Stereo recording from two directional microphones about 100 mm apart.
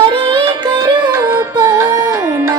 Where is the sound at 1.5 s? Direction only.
35° right (ahead or behind).